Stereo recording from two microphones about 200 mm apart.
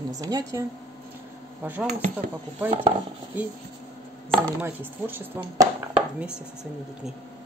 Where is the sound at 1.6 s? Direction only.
10° right (ahead or behind).